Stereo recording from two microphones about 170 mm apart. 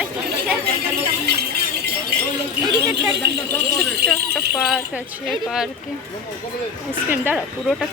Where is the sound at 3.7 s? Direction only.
70° right (ahead or behind).